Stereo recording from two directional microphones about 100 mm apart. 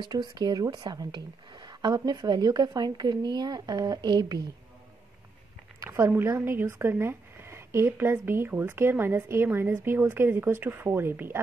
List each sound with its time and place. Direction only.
0.0 s a woman's voice: 50° right (ahead or behind)
5.9 s speech: 25° right (ahead or behind)